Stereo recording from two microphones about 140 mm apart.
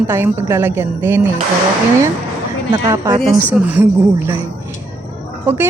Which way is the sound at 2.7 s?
30° right (ahead or behind).